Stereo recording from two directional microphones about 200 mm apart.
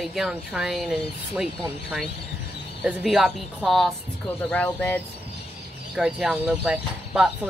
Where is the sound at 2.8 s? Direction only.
Centre (ahead or behind).